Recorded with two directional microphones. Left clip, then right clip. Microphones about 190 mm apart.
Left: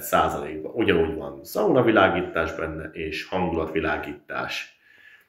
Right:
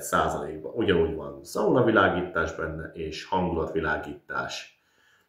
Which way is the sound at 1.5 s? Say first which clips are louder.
Left 3 dB; 40° right (ahead or behind).